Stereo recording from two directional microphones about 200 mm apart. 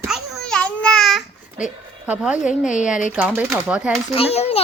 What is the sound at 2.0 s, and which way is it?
Speech, 5° right (ahead or behind).